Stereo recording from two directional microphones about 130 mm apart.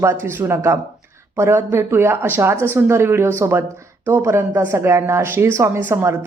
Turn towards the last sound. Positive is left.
turn(degrees=-20)  # may be behind; listen again after turning